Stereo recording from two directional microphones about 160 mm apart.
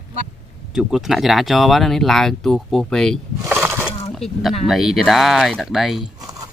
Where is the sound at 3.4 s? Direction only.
15° right (ahead or behind).